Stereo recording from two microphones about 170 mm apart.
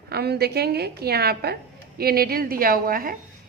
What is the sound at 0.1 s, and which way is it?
A woman's voice, 70° right (ahead or behind).